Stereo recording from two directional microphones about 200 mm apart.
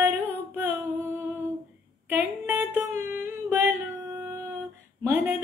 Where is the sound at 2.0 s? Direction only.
10° right (ahead or behind).